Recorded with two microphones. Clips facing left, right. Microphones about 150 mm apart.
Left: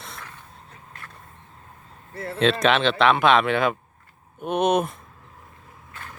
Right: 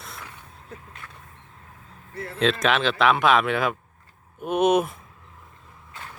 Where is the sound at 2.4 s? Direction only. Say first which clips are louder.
Left 2 dB; centre (ahead or behind).